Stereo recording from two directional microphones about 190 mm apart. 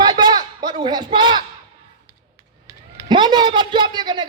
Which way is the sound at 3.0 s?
25° right (ahead or behind).